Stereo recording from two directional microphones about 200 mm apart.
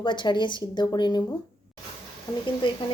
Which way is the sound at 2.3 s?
15° left (ahead or behind).